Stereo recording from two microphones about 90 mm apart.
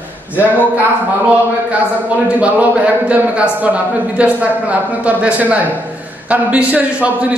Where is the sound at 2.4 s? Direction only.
15° right (ahead or behind).